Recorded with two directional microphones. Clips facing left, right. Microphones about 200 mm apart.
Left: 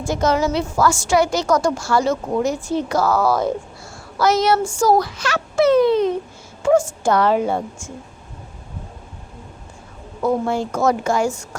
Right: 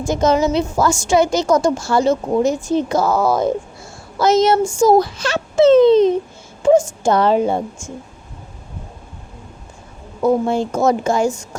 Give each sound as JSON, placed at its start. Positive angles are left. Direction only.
{"t": 0.1, "sound": "a woman's voice", "side_deg": -20}
{"t": 10.2, "sound": "a woman's voice", "side_deg": -25}